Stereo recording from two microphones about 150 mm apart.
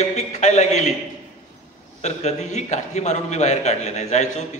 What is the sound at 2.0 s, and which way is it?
A man's voice, 50° left (ahead or behind).